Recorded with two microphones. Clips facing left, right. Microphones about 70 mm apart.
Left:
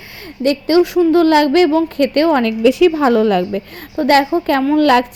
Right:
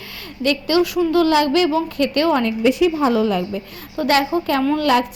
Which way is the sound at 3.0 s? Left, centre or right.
Left.